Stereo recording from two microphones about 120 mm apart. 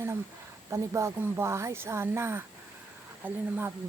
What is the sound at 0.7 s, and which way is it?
Speech, 25° right (ahead or behind).